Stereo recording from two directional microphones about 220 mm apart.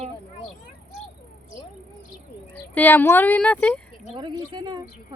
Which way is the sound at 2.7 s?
10° left (ahead or behind).